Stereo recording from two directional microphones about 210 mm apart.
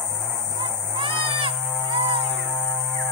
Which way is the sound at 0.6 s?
25° right (ahead or behind).